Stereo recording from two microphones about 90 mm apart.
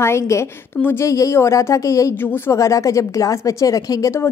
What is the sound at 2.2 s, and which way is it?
A woman's voice, 25° left (ahead or behind).